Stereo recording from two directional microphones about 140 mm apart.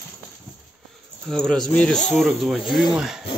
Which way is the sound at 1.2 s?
5° left (ahead or behind).